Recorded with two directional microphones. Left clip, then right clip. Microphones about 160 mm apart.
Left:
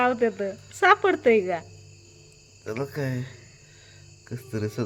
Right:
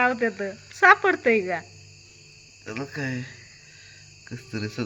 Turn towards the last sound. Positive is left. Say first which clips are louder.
# left 1 dB
turn(degrees=35)  # may be behind; listen again after turning